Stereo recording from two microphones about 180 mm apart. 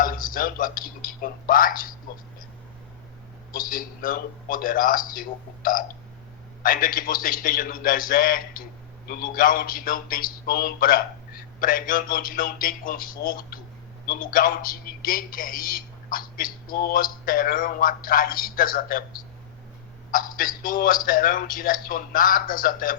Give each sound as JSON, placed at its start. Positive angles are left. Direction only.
{"t": 0.0, "sound": "a man's voice", "side_deg": 50}
{"t": 3.5, "sound": "a man's voice", "side_deg": 50}
{"t": 20.1, "sound": "a man's voice", "side_deg": 50}